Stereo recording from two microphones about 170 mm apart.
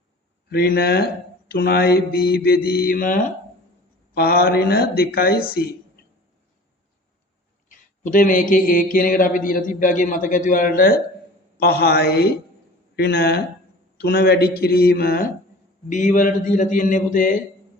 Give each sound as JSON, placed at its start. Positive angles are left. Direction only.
{"t": 0.5, "sound": "mantra", "side_deg": 65}
{"t": 8.0, "sound": "a man's voice", "side_deg": 50}
{"t": 14.0, "sound": "mantra", "side_deg": 70}
{"t": 15.9, "sound": "a man's voice", "side_deg": 50}